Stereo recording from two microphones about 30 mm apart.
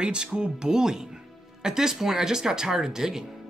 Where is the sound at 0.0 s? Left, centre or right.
Right.